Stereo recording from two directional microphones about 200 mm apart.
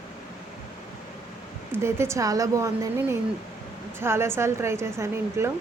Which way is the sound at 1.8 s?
15° right (ahead or behind).